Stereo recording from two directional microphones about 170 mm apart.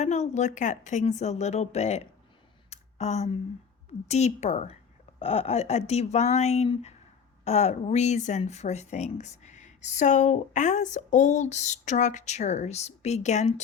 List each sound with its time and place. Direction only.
0.0 s a woman's voice: 40° left (ahead or behind)
2.6 s a sound: 40° left (ahead or behind)
4.1 s a woman's voice: 40° left (ahead or behind)